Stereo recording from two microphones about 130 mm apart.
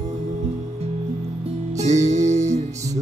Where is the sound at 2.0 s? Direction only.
60° right (ahead or behind).